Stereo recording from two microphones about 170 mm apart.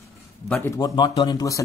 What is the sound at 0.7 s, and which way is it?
Speech, 20° left (ahead or behind).